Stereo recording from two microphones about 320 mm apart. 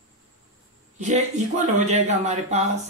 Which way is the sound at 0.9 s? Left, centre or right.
Right.